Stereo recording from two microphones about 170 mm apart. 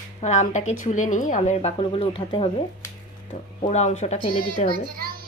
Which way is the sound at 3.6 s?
40° left (ahead or behind).